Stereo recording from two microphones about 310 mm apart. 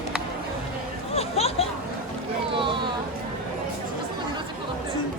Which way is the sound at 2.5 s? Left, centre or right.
Centre.